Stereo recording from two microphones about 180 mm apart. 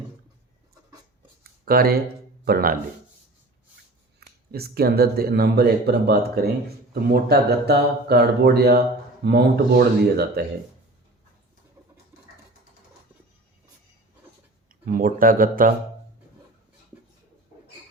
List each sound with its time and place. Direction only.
1.6 s speech: 55° right (ahead or behind)
4.2 s speech: 60° right (ahead or behind)
14.8 s speech: 50° right (ahead or behind)